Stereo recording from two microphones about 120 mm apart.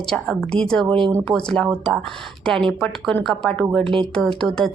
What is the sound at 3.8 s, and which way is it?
Speech, 45° right (ahead or behind).